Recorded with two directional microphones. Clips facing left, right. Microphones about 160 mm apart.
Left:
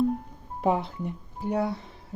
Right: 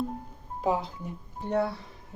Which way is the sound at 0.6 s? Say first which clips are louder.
Left 3 dB; 60° left (ahead or behind).